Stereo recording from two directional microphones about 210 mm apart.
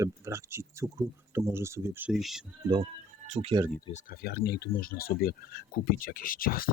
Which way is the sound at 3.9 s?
45° left (ahead or behind).